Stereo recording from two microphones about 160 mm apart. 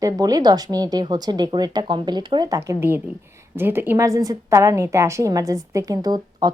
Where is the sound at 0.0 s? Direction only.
25° right (ahead or behind).